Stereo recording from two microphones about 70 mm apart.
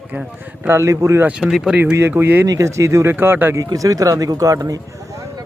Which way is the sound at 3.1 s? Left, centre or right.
Right.